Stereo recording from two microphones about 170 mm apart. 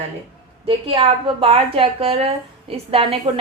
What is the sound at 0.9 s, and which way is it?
A woman's voice, 35° right (ahead or behind).